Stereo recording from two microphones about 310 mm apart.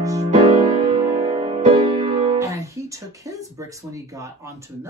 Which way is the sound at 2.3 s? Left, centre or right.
Centre.